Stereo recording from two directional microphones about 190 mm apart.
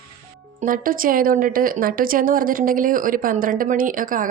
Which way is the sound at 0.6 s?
45° right (ahead or behind).